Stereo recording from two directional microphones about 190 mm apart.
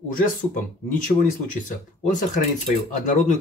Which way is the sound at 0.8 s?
45° left (ahead or behind).